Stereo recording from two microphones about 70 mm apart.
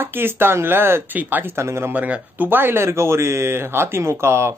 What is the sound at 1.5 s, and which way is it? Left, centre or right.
Speech, right.